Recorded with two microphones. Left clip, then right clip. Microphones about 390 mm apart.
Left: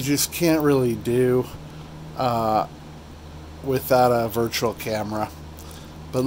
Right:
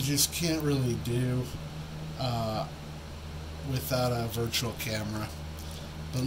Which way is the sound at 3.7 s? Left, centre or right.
Centre.